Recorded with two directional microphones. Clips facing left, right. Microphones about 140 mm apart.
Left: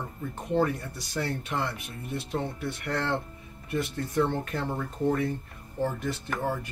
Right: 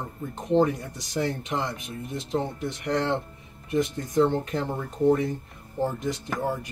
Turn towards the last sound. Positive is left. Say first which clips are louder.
# right 2 dB
turn(degrees=-15)  # may be behind; listen again after turning